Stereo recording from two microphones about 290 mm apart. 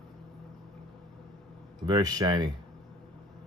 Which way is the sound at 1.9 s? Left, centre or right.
Centre.